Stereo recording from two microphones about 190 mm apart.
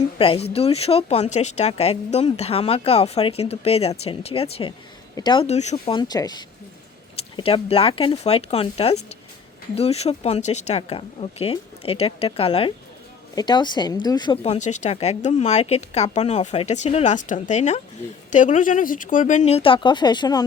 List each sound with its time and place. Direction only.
0.2 s speech: 30° left (ahead or behind)
5.7 s speech: 25° left (ahead or behind)
14.4 s speech: 35° left (ahead or behind); by 20.4 s 20° left (ahead or behind)